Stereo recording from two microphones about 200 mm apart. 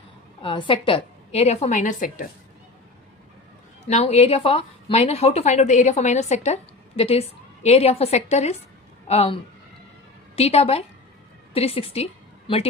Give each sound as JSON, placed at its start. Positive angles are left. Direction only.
{"t": 0.4, "sound": "a woman's voice", "side_deg": 25}
{"t": 3.8, "sound": "a woman's voice", "side_deg": 35}